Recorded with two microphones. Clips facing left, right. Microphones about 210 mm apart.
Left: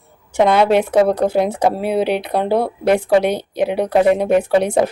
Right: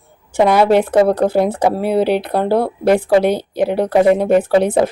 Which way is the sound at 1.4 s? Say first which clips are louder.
Right 1 dB; 10° left (ahead or behind).